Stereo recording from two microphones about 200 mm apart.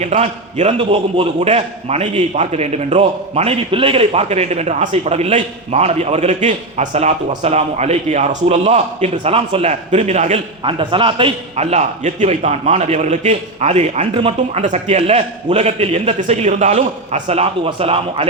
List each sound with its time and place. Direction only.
0.0 s a man's voice: 35° right (ahead or behind)